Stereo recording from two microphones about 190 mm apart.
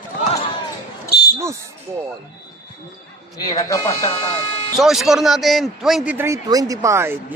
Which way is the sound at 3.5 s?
15° left (ahead or behind).